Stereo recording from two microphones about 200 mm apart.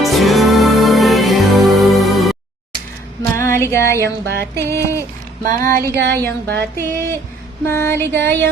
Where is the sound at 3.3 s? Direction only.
15° left (ahead or behind).